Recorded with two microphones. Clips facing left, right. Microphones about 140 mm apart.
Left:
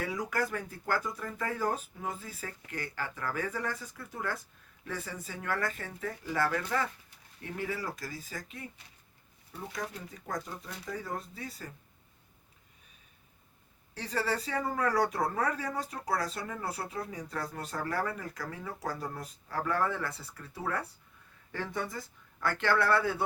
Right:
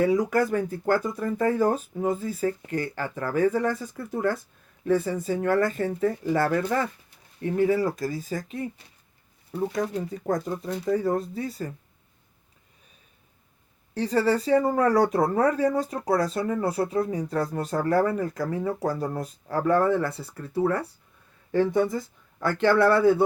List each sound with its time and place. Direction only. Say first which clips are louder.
0.0 s speech: right 13 dB; 45° right (ahead or behind)
0.3 s speech: right 10 dB; 30° right (ahead or behind)
6.5 s speech: right 7 dB; 45° right (ahead or behind); by 8.4 s 30° right (ahead or behind)
9.8 s speech: right 13 dB; 35° right (ahead or behind)
11.4 s speech: right 11 dB; 30° right (ahead or behind)
13.9 s speech: right 13 dB; 25° right (ahead or behind)
14.5 s speech: right 10 dB; 45° right (ahead or behind); by 23.1 s 25° right (ahead or behind)